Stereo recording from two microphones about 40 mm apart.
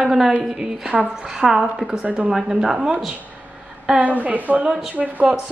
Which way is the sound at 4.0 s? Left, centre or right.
Right.